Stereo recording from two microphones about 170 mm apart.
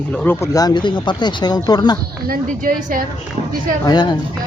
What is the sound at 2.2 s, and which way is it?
Speech, 55° right (ahead or behind).